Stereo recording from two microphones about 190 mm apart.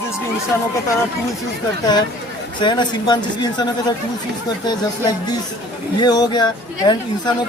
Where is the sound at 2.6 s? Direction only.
25° left (ahead or behind).